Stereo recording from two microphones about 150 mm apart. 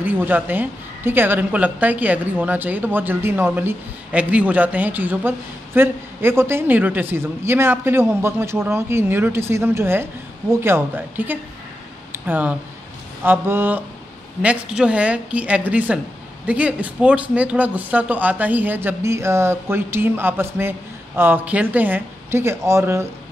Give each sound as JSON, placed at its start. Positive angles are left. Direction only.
{"t": 0.0, "sound": "a woman's voice", "side_deg": -10}
{"t": 12.1, "sound": "a sound", "side_deg": -10}
{"t": 13.2, "sound": "a woman's voice", "side_deg": -15}